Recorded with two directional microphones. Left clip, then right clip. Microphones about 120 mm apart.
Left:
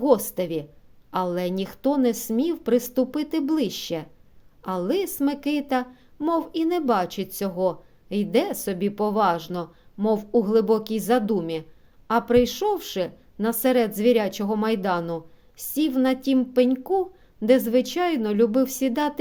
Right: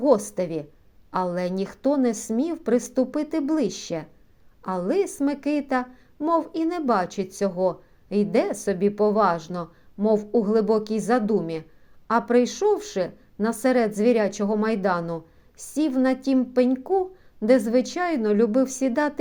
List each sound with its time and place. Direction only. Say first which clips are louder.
0.0 s a woman's voice: even; 25° left (ahead or behind)